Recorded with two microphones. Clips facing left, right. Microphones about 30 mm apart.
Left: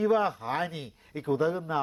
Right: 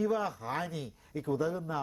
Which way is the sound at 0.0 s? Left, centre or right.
Left.